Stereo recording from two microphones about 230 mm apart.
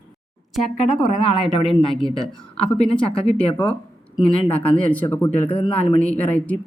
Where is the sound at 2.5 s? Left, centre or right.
Centre.